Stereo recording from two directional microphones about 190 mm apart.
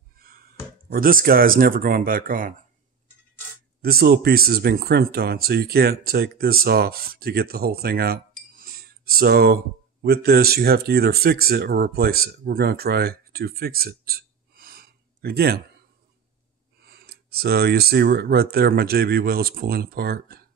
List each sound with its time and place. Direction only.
0.2 s speech: 50° right (ahead or behind)
3.8 s speech: 55° right (ahead or behind)
16.8 s speech: 55° right (ahead or behind)